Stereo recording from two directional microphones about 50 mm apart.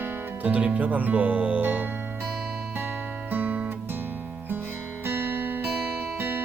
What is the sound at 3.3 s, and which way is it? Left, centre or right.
Music, right.